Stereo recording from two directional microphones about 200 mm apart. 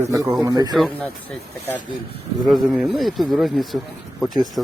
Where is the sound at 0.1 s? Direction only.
15° right (ahead or behind).